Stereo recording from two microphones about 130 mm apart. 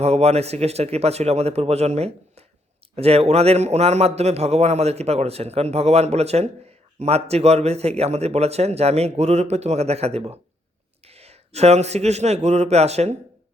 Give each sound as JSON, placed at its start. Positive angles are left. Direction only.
{"t": 0.0, "sound": "a man's voice", "side_deg": -55}